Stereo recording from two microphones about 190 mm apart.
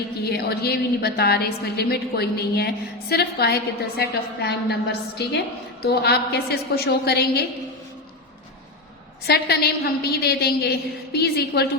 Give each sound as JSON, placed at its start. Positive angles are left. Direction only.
{"t": 0.3, "sound": "a woman's voice", "side_deg": 55}
{"t": 9.2, "sound": "a woman's voice", "side_deg": 55}